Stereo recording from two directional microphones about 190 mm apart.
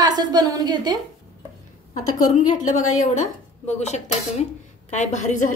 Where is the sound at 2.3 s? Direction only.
40° left (ahead or behind).